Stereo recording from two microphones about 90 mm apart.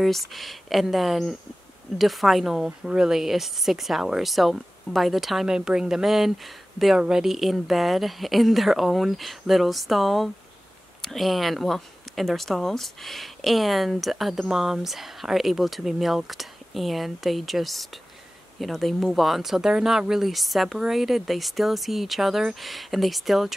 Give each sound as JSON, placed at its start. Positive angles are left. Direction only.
{"t": 0.0, "sound": "speech", "side_deg": 0}